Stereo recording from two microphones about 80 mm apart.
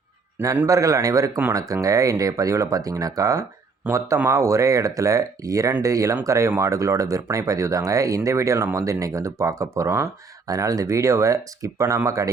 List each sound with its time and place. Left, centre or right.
0.7 s speech: right